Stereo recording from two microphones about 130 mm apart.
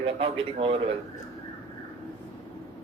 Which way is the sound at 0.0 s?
45° right (ahead or behind).